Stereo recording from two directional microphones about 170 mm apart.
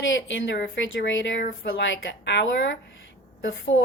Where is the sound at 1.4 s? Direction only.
75° left (ahead or behind).